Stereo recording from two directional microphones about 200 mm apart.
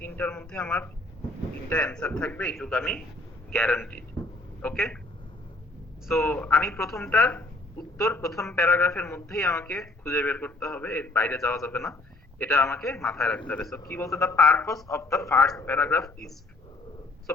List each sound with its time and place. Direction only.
0.0 s a man's voice: 10° left (ahead or behind)
6.1 s a man's voice: 10° left (ahead or behind)
13.9 s a man's voice: 15° left (ahead or behind)
17.3 s a sound: 10° left (ahead or behind)